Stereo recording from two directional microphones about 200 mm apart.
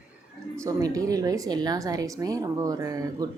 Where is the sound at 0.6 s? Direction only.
15° right (ahead or behind).